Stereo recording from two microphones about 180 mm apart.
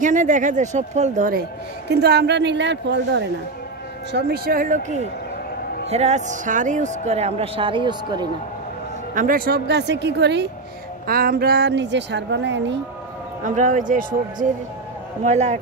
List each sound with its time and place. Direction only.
0.0 s speech: 45° right (ahead or behind)
1.9 s a woman's voice: 65° right (ahead or behind)
4.1 s a woman's voice: 55° right (ahead or behind); by 8.3 s 25° right (ahead or behind)
9.1 s a woman's voice: 50° right (ahead or behind); by 10.5 s 70° right (ahead or behind)
11.1 s a woman's voice: 55° right (ahead or behind); by 12.7 s 80° right
13.4 s a woman's voice: 45° right (ahead or behind)